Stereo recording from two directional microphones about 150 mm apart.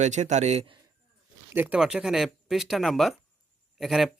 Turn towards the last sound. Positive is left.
turn(degrees=0)  # may be behind; listen again after turning